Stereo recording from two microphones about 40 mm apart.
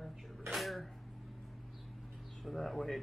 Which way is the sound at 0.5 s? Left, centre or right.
Centre.